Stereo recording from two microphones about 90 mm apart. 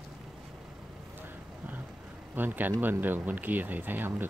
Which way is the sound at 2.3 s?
20° right (ahead or behind).